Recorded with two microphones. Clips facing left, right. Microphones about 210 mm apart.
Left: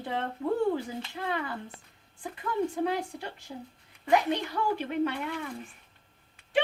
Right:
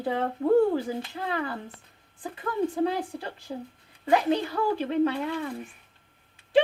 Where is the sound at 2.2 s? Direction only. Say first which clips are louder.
Right 2 dB; 30° right (ahead or behind).